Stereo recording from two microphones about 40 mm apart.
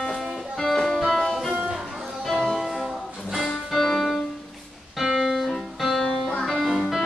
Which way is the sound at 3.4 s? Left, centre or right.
Centre.